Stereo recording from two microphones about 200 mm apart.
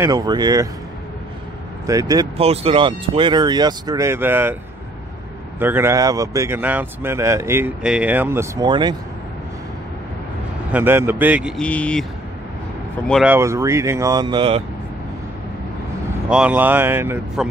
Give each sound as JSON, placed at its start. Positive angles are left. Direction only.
{"t": 0.0, "sound": "speech", "side_deg": -20}
{"t": 1.9, "sound": "speech", "side_deg": -20}
{"t": 2.3, "sound": "speech", "side_deg": -30}
{"t": 5.6, "sound": "speech", "side_deg": -10}
{"t": 10.7, "sound": "speech", "side_deg": -10}
{"t": 13.1, "sound": "speech", "side_deg": -5}
{"t": 16.3, "sound": "speech", "side_deg": -5}